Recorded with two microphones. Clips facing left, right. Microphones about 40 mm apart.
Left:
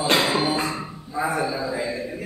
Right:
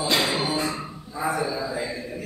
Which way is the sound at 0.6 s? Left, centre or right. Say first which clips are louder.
Left 1 dB; centre.